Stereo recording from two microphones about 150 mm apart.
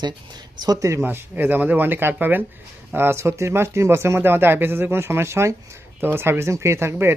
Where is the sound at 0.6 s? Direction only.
25° right (ahead or behind).